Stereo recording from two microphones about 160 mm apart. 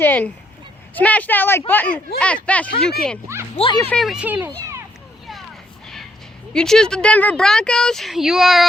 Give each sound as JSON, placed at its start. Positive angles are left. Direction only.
{"t": 0.0, "sound": "speech", "side_deg": 10}
{"t": 3.5, "sound": "speech", "side_deg": 35}
{"t": 3.8, "sound": "speech", "side_deg": 5}
{"t": 5.8, "sound": "vehicle", "side_deg": 5}
{"t": 6.5, "sound": "speech", "side_deg": 5}